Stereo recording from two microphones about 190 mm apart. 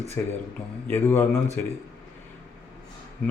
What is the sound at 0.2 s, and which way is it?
Speech, 10° left (ahead or behind).